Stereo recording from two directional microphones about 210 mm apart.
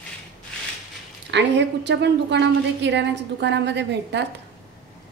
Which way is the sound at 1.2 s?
55° right (ahead or behind).